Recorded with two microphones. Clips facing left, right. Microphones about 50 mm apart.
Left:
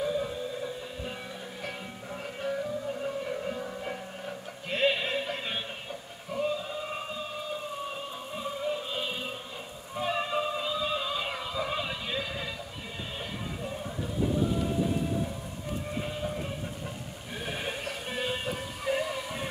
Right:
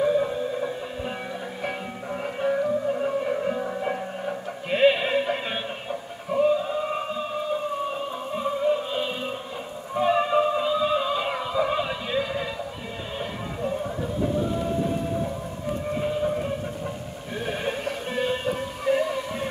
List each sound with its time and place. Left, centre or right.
0.0 s music: right
2.2 s music: right; by 12.4 s centre
13.2 s a sound: centre
17.5 s music: centre